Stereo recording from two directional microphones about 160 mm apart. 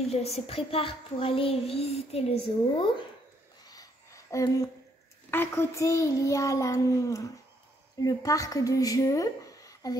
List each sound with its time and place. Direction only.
0.1 s a child's voice: 40° left (ahead or behind)
3.6 s a sound: 20° left (ahead or behind)
5.3 s a child's voice: 15° left (ahead or behind)